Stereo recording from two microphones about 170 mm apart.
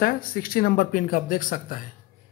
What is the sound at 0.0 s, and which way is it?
Speech, 60° left (ahead or behind).